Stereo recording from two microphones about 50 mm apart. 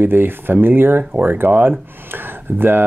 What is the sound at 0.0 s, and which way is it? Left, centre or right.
Speech, right.